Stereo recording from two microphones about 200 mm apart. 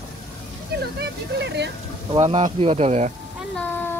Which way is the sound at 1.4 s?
60° right (ahead or behind).